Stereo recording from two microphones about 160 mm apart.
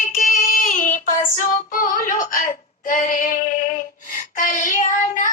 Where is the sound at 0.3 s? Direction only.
55° left (ahead or behind).